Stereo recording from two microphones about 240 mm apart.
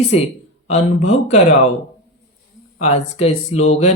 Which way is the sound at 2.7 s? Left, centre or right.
Left.